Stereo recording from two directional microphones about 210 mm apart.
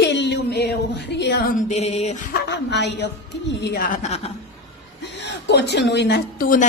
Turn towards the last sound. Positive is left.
turn(degrees=45)  # may be behind; listen again after turning